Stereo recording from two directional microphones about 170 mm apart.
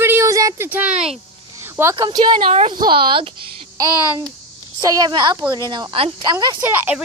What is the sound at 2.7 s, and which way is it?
Speech, 25° right (ahead or behind).